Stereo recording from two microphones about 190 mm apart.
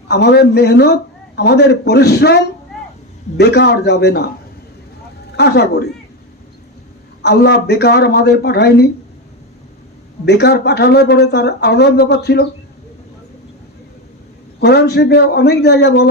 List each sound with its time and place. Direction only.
0.1 s speech: 60° left (ahead or behind)
5.4 s speech: 60° left (ahead or behind)
7.2 s speech: 60° left (ahead or behind)
10.2 s speech: 60° left (ahead or behind)
14.6 s speech: 60° left (ahead or behind)